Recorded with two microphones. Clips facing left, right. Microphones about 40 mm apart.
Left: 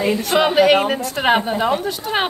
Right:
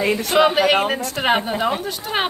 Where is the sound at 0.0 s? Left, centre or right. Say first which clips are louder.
Left 1 dB; right.